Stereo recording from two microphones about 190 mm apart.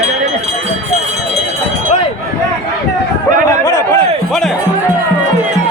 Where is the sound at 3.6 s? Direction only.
15° left (ahead or behind).